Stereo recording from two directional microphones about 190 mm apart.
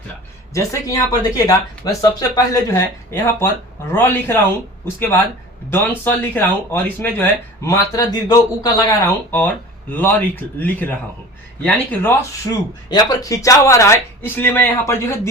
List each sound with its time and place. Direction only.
0.5 s speech: 15° left (ahead or behind)
5.7 s speech: 10° left (ahead or behind)